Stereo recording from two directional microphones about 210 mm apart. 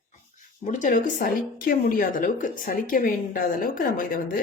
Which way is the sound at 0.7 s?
35° left (ahead or behind).